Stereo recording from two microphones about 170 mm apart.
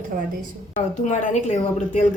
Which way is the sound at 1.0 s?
45° left (ahead or behind).